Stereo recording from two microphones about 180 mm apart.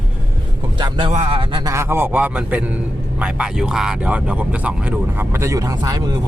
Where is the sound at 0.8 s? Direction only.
25° right (ahead or behind).